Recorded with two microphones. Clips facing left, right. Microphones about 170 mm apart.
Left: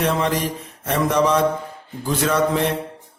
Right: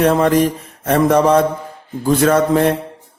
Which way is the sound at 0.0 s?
50° right (ahead or behind).